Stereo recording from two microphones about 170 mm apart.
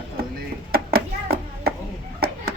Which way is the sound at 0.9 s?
65° right (ahead or behind).